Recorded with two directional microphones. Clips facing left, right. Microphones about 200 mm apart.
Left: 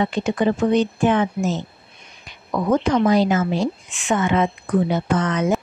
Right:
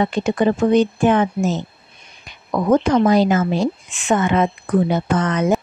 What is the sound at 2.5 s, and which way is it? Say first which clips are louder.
A woman's voice: right 3 dB; 45° right (ahead or behind).